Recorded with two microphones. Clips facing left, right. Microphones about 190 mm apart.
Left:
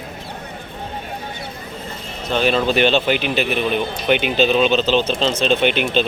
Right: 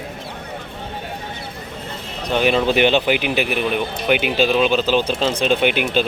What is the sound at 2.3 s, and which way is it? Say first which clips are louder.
Speech: right 1 dB; 15° right (ahead or behind).